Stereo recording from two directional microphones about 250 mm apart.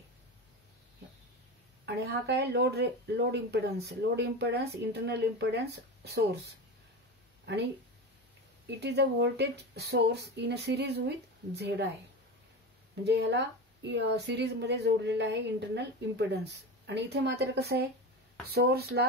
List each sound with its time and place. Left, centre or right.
1.9 s speech: right
8.6 s speech: right
13.0 s speech: right